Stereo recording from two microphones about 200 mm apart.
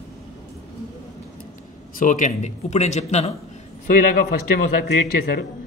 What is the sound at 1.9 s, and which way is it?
Speech, 40° left (ahead or behind).